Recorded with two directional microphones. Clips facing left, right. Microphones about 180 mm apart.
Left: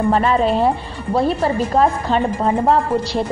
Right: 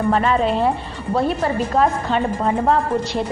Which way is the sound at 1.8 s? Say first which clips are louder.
Left 2 dB; 30° left (ahead or behind).